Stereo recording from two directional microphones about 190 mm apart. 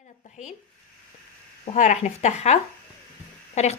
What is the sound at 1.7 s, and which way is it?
Speech, 40° left (ahead or behind).